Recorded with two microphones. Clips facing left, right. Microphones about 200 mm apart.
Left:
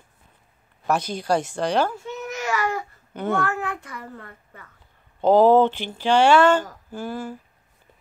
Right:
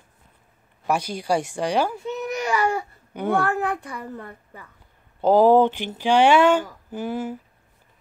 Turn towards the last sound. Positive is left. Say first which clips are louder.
# right 3 dB
turn(degrees=-20)  # may be behind; listen again after turning